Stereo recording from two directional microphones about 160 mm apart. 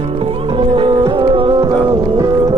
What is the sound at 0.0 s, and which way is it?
Music, 35° right (ahead or behind).